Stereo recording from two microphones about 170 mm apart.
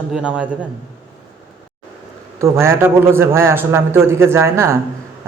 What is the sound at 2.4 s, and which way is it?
A man's voice, 15° right (ahead or behind).